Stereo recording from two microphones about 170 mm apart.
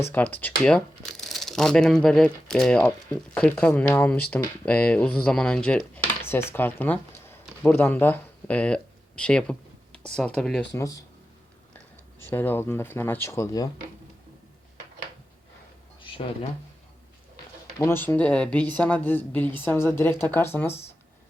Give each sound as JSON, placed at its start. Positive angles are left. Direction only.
{"t": 0.1, "sound": "speech", "side_deg": 10}
{"t": 12.3, "sound": "speech", "side_deg": 10}
{"t": 16.0, "sound": "a sound", "side_deg": 30}
{"t": 17.7, "sound": "speech", "side_deg": 15}